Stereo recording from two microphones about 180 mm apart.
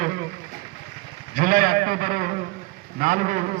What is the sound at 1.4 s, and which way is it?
A man's voice, 50° right (ahead or behind).